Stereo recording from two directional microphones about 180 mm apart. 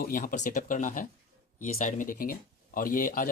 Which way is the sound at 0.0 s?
50° left (ahead or behind).